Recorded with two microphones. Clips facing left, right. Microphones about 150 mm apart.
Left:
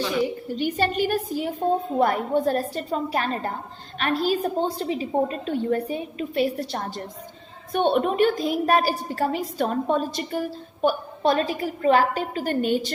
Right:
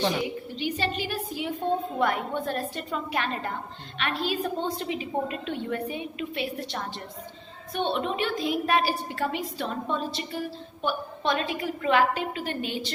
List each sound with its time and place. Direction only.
0.5 s a woman's voice: 45° left (ahead or behind)